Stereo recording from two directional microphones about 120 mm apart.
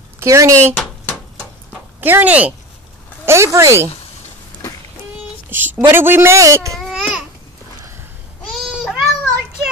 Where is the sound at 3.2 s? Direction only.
20° right (ahead or behind).